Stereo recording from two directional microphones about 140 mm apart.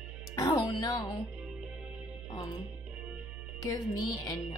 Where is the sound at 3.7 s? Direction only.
25° left (ahead or behind).